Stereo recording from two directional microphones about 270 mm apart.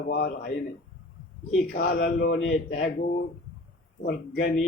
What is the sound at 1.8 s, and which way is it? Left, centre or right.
Speech, left.